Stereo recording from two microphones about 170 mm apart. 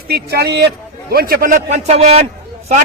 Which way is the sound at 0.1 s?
70° right (ahead or behind).